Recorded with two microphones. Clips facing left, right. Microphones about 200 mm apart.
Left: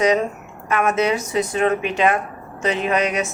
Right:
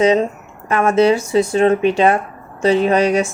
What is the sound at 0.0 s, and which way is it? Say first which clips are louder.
Speech: right 4 dB; 25° right (ahead or behind).